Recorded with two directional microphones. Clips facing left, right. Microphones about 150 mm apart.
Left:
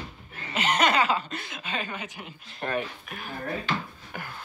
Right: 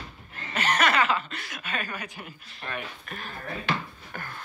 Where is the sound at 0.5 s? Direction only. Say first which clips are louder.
Left 1 dB; 25° left (ahead or behind).